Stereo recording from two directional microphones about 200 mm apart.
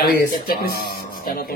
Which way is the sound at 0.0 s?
50° left (ahead or behind).